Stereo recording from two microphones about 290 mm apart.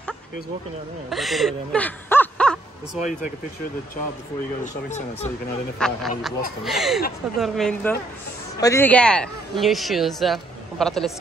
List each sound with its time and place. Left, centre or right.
1.1 s speech: centre
4.8 s speech: left
5.8 s speech: centre